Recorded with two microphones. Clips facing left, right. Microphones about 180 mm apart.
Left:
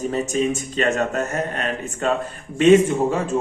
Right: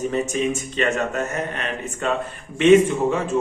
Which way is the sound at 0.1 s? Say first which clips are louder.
Left 1 dB; 40° left (ahead or behind).